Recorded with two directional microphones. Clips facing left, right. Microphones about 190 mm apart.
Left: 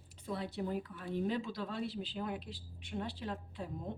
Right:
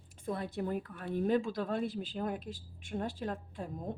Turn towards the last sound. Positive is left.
turn(degrees=-50)  # may be behind; listen again after turning